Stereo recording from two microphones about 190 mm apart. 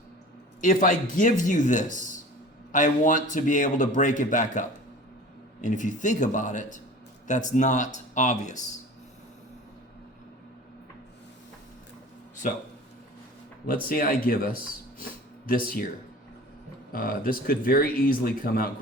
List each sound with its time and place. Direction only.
0.6 s speech: 45° left (ahead or behind)
12.4 s speech: 45° left (ahead or behind)
13.8 s speech: 50° left (ahead or behind)
14.9 s a sound: 50° left (ahead or behind)
16.9 s speech: 50° left (ahead or behind)